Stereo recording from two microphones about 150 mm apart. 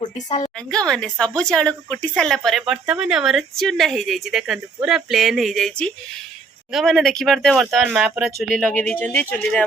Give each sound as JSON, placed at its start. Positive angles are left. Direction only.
{"t": 0.0, "sound": "a sound", "side_deg": 30}
{"t": 0.9, "sound": "speech", "side_deg": 5}
{"t": 8.7, "sound": "speech", "side_deg": 10}